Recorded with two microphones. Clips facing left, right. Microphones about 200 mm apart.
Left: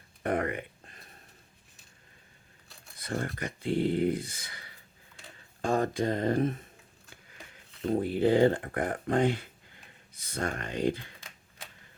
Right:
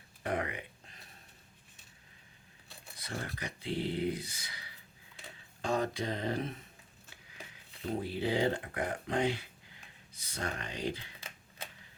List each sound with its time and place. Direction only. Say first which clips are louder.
0.2 s a sound: left 6 dB; 50° left (ahead or behind)
3.0 s speech: left 7 dB; 50° left (ahead or behind)
7.9 s speech: left 8 dB; 50° left (ahead or behind)